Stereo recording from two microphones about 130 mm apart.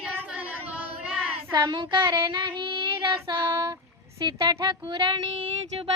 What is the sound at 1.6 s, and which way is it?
Speech, 35° right (ahead or behind).